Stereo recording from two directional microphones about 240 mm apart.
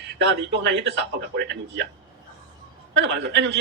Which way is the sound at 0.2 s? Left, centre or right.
Right.